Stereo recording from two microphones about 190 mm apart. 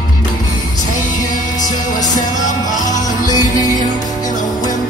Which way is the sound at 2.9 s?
20° left (ahead or behind).